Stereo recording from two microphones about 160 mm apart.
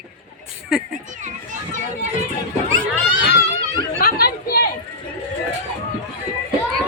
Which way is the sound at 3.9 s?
70° left (ahead or behind).